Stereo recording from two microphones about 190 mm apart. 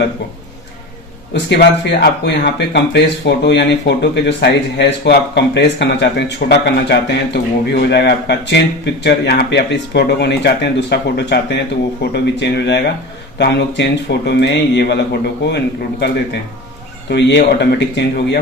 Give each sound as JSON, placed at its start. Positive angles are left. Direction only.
{"t": 1.3, "sound": "speech", "side_deg": 65}